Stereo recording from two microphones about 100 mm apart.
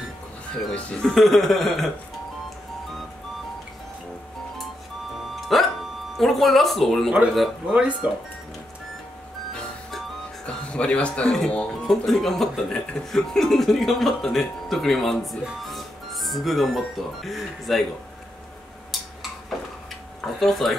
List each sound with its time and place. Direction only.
0.7 s speech: 10° left (ahead or behind)
1.1 s speech: centre (ahead or behind)
5.3 s music: centre (ahead or behind)
6.1 s speech: centre (ahead or behind)
7.6 s speech: 10° right (ahead or behind)
9.5 s music: 5° left (ahead or behind)
11.3 s speech: 10° left (ahead or behind)
20.3 s speech: 5° left (ahead or behind)